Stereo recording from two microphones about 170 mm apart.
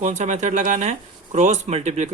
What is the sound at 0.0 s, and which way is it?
Speech, 45° right (ahead or behind).